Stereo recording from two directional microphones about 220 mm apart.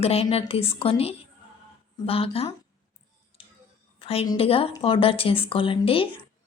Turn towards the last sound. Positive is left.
turn(degrees=25)  # may be behind; listen again after turning